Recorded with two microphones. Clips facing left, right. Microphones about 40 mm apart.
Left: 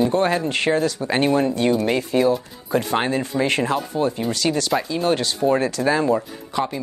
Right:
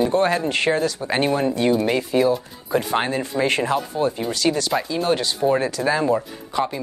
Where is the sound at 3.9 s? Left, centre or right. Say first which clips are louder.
Even; right.